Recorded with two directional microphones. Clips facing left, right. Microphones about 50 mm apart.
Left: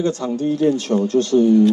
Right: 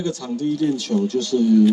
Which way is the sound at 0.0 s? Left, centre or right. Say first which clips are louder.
Left 4 dB; left.